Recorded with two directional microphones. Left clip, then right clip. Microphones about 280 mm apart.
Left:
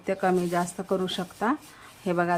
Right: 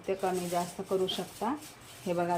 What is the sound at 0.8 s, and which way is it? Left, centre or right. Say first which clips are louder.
Speech: left 6 dB; left.